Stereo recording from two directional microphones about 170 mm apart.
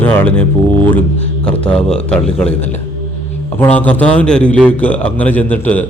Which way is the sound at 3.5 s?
10° left (ahead or behind).